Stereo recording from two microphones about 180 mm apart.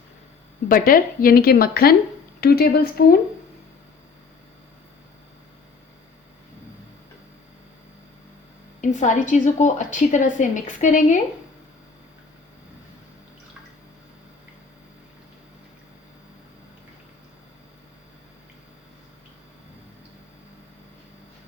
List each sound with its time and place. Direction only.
0.7 s a woman's voice: 50° left (ahead or behind)
8.8 s a woman's voice: 45° left (ahead or behind)